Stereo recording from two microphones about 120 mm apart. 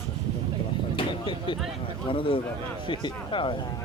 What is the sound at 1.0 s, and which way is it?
Vehicle, 40° left (ahead or behind).